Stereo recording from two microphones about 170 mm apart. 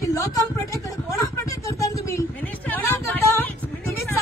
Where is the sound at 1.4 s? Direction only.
20° left (ahead or behind).